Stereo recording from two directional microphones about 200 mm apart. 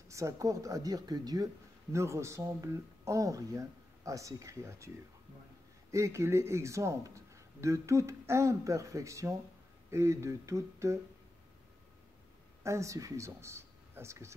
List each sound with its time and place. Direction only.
0.1 s speech: 15° right (ahead or behind)
12.6 s speech: 15° right (ahead or behind)